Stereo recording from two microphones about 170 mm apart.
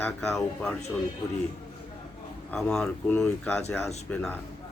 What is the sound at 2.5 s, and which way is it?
Speech, 5° left (ahead or behind).